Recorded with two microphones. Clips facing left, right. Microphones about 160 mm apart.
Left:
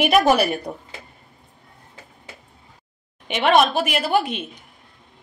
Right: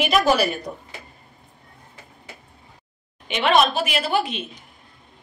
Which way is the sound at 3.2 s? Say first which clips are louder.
Left 2 dB; 55° left (ahead or behind).